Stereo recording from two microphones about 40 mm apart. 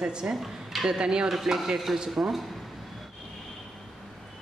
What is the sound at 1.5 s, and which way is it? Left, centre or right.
Speech, centre.